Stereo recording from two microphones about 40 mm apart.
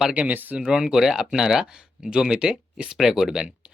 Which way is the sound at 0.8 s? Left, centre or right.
Centre.